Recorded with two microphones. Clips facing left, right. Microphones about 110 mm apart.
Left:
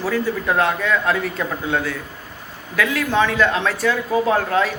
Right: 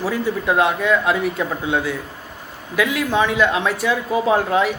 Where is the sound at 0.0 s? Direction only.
15° right (ahead or behind).